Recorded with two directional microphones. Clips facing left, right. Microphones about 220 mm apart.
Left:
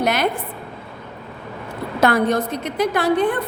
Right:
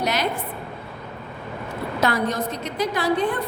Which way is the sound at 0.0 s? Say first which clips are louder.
Left 4 dB; 55° left (ahead or behind).